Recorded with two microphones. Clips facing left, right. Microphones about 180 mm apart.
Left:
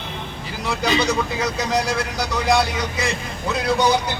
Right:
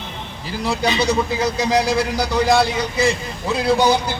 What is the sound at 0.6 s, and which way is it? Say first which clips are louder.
A man's voice: right 1 dB; 35° right (ahead or behind).